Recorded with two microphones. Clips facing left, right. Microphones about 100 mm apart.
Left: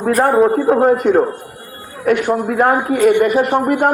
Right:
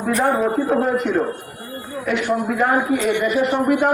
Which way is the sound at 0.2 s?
45° left (ahead or behind).